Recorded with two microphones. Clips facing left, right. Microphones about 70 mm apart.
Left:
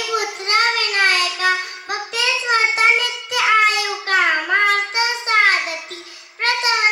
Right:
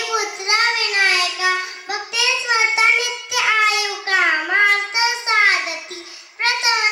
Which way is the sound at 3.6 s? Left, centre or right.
Left.